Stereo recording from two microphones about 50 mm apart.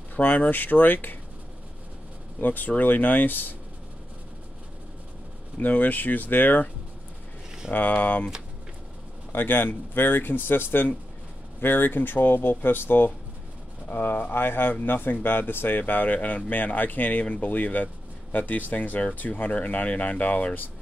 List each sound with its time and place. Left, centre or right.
0.1 s speech: left
2.4 s speech: left
5.6 s speech: left
7.7 s speech: left
9.3 s speech: left